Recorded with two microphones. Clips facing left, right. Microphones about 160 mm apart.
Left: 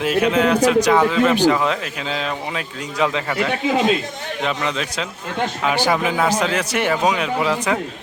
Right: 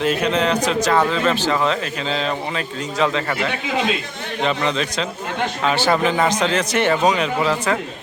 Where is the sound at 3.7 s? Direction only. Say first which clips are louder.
Left 4 dB; 45° left (ahead or behind).